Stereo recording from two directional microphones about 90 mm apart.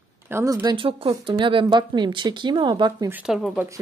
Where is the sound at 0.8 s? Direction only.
90° right.